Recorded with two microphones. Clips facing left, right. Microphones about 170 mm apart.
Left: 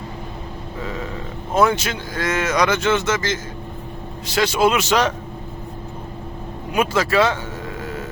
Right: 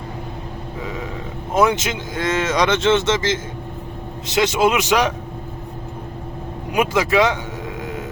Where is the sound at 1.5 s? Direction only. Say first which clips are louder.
Even; 20° right (ahead or behind).